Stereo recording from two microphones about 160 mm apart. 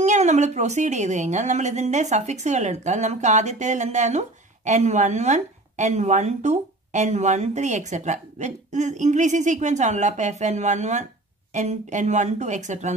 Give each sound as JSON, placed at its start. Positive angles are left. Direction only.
{"t": 0.0, "sound": "a woman's voice", "side_deg": -45}